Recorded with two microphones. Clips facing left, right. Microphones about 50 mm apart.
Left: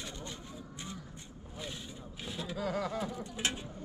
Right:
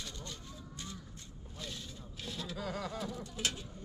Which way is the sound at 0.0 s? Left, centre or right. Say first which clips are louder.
Left 3 dB; left.